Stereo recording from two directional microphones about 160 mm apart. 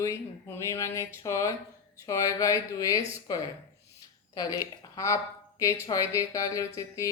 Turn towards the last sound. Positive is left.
turn(degrees=20)  # may be behind; listen again after turning